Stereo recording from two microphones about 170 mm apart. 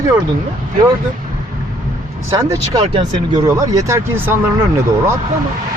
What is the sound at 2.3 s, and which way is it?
Speech, 20° right (ahead or behind).